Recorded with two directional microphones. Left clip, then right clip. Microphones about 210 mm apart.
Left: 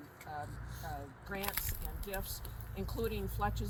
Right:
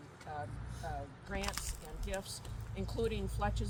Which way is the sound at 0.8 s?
5° right (ahead or behind).